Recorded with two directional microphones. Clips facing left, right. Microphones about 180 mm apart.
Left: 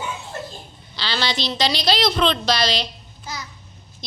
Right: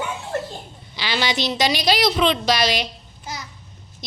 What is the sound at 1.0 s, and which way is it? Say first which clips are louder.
A woman's voice: right 2 dB; 15° right (ahead or behind).